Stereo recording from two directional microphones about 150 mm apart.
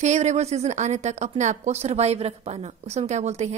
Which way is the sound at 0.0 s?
50° right (ahead or behind).